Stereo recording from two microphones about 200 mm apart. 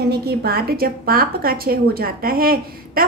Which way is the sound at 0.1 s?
55° right (ahead or behind).